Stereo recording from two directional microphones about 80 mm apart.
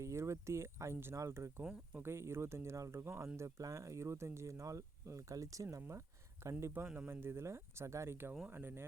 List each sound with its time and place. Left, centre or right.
0.0 s speech: right
6.8 s speech: centre
7.1 s speech: right